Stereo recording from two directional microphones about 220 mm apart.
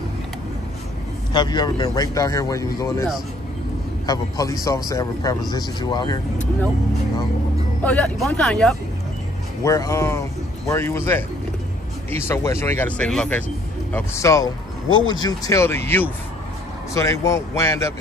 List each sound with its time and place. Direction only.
1.3 s speech: 20° left (ahead or behind)
7.8 s speech: 5° left (ahead or behind)
9.6 s speech: 15° left (ahead or behind)